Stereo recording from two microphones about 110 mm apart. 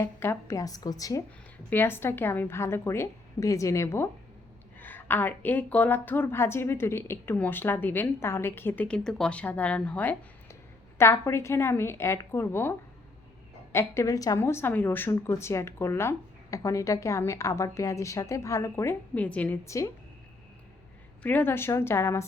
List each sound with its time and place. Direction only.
0.0 s a woman's voice: 20° left (ahead or behind)
1.7 s a woman's voice: 20° left (ahead or behind)
13.7 s a woman's voice: 25° left (ahead or behind)
19.1 s a woman's voice: 10° left (ahead or behind)
19.6 s a woman's voice: 30° left (ahead or behind)
21.2 s a woman's voice: 20° left (ahead or behind)